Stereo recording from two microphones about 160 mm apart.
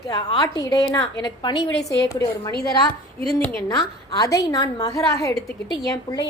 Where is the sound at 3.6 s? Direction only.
25° left (ahead or behind).